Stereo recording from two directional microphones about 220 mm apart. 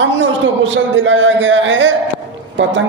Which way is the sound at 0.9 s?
60° right (ahead or behind).